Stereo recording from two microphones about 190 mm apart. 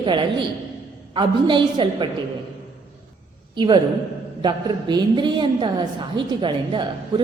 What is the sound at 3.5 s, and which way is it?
A woman's voice, 25° right (ahead or behind).